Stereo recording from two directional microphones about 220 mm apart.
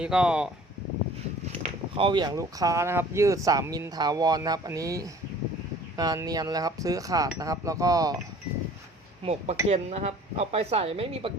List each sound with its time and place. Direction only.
0.0 s speech: 5° right (ahead or behind)
1.6 s speech: 25° right (ahead or behind)
9.2 s speech: 30° right (ahead or behind)